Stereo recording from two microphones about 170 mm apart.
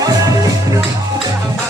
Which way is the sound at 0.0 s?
20° right (ahead or behind).